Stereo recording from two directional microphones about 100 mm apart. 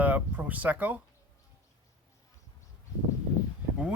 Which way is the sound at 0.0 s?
15° right (ahead or behind).